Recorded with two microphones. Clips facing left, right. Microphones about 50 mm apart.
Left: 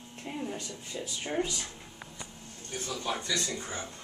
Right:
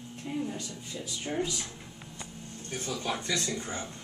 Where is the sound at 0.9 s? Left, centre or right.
Centre.